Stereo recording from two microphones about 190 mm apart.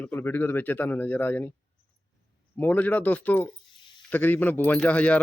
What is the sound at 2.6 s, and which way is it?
Speech, 10° left (ahead or behind).